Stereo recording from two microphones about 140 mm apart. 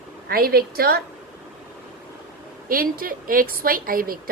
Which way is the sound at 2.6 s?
90° right.